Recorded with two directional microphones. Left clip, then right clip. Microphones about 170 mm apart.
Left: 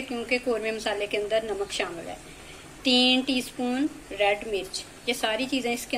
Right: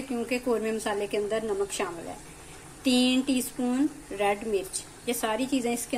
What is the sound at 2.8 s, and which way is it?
A woman's voice, 45° right (ahead or behind).